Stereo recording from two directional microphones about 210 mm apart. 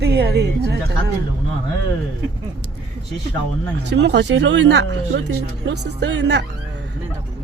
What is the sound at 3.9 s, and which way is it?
Speech, 55° right (ahead or behind).